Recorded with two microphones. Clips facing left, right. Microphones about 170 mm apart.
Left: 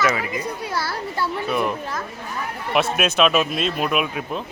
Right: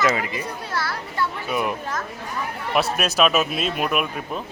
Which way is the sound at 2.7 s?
Centre (ahead or behind).